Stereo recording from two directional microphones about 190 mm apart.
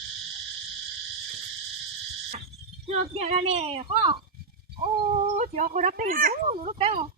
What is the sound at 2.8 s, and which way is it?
A woman's voice, 35° right (ahead or behind).